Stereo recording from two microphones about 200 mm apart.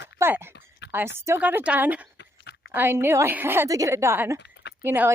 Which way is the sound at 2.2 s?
55° left (ahead or behind).